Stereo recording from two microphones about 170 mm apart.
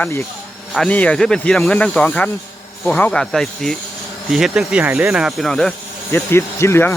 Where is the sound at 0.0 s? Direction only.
15° left (ahead or behind).